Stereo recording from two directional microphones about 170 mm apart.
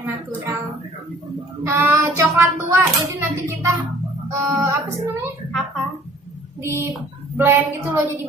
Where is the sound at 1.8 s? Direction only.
15° right (ahead or behind).